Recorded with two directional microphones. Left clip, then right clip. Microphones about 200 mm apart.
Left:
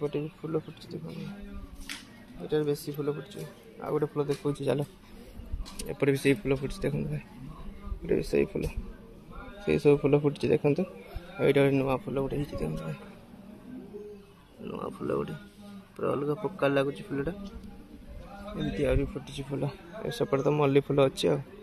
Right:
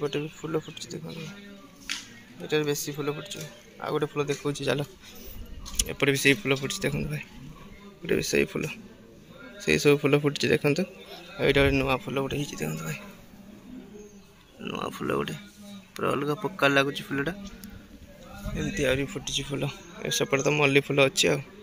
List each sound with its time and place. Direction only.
0.4 s speech: 15° right (ahead or behind)
0.7 s speech: 5° right (ahead or behind)
2.4 s speech: 5° right (ahead or behind)
14.6 s speech: 5° right (ahead or behind)
18.6 s speech: centre (ahead or behind)